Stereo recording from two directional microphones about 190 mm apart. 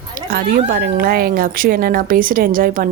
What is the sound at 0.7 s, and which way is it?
A woman's voice, 55° right (ahead or behind).